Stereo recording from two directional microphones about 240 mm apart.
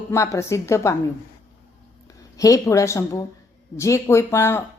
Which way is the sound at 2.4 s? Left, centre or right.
Centre.